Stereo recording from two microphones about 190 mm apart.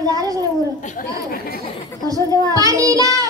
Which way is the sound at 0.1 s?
20° right (ahead or behind).